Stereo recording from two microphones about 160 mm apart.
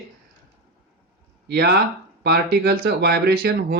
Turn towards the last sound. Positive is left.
turn(degrees=-90)